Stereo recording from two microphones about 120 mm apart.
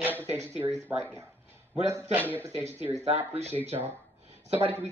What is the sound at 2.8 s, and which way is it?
Speech, 15° right (ahead or behind).